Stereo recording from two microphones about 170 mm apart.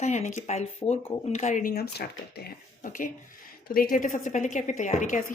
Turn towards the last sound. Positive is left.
turn(degrees=50)  # may be behind; listen again after turning